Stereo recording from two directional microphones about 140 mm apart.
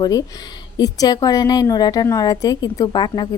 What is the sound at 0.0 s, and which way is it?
A woman's voice, 25° left (ahead or behind).